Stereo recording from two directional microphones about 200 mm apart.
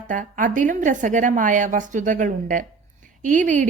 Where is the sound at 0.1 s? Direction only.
40° right (ahead or behind).